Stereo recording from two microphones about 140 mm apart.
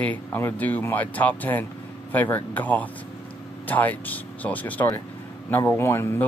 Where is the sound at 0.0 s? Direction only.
10° left (ahead or behind).